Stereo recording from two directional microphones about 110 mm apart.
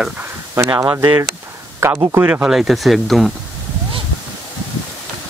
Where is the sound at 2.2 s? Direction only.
10° right (ahead or behind).